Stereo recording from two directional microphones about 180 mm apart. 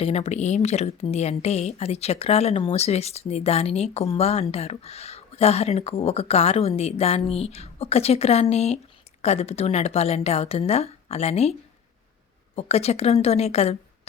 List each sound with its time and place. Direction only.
0.0 s a woman's voice: 35° left (ahead or behind)
12.5 s a woman's voice: 35° left (ahead or behind)